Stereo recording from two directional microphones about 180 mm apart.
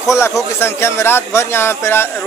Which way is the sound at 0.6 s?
15° left (ahead or behind).